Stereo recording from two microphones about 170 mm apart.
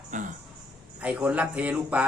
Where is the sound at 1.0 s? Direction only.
10° right (ahead or behind).